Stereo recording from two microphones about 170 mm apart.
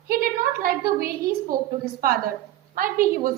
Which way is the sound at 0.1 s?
60° right (ahead or behind).